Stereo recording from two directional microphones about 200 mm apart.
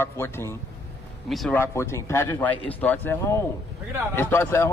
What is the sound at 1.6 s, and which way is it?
A man's voice, 15° left (ahead or behind).